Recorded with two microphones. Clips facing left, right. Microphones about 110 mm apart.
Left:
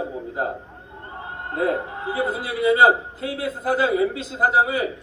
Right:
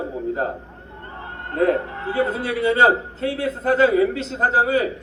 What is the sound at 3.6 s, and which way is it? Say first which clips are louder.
Speech: right 3 dB; 30° right (ahead or behind).